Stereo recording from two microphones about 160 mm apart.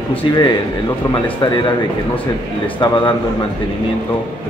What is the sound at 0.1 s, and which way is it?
Speech, 30° left (ahead or behind).